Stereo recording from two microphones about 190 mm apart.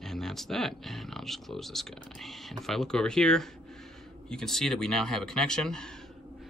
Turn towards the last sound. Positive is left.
turn(degrees=5)  # may be behind; listen again after turning